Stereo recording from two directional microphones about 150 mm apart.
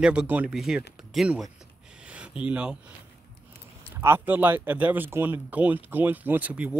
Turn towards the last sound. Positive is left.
turn(degrees=-10)  # may be behind; listen again after turning